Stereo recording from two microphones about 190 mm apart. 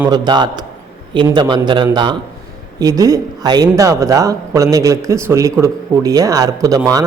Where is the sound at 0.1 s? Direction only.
25° right (ahead or behind).